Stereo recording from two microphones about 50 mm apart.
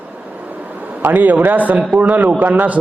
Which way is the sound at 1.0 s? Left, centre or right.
Right.